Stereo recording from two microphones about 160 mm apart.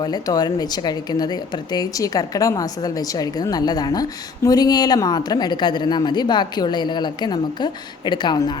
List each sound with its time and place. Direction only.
0.0 s speech: 25° left (ahead or behind)